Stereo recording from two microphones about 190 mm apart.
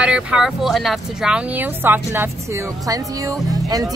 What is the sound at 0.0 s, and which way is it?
Speech, 5° right (ahead or behind).